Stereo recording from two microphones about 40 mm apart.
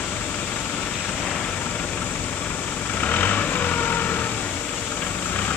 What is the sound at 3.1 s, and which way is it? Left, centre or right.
Vehicle, left.